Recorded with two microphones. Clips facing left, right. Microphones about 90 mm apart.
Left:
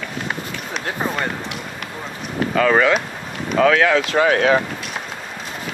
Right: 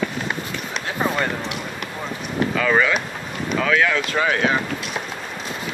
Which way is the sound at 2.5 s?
55° left (ahead or behind).